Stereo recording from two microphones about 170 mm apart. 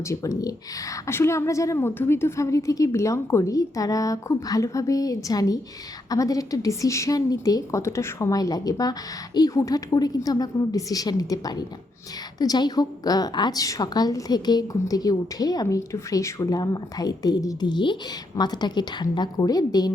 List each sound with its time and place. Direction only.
0.1 s a woman's voice: 20° left (ahead or behind)